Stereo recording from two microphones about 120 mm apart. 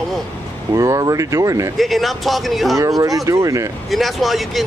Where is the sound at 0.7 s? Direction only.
25° right (ahead or behind).